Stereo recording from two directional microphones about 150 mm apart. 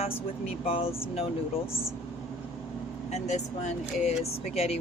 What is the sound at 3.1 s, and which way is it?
Speech, 45° left (ahead or behind).